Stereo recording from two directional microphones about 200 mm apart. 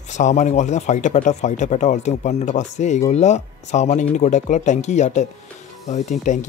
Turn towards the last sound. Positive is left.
turn(degrees=35)  # may be behind; listen again after turning